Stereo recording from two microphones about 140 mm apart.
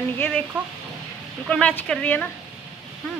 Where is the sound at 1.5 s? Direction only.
10° left (ahead or behind).